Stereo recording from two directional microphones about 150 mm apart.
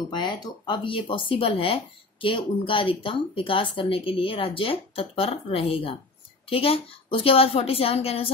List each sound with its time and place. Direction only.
0.1 s speech: 30° left (ahead or behind)